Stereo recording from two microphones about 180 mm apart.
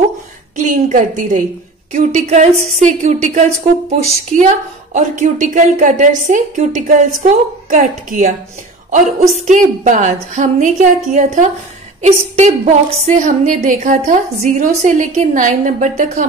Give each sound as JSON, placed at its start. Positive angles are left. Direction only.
{"t": 0.6, "sound": "a woman's voice", "side_deg": -45}
{"t": 9.5, "sound": "a woman's voice", "side_deg": -45}